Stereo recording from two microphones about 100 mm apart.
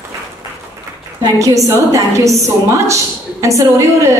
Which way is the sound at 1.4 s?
35° right (ahead or behind).